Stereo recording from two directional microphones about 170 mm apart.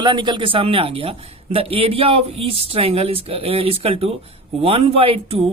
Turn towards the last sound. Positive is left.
turn(degrees=-35)  # may be behind; listen again after turning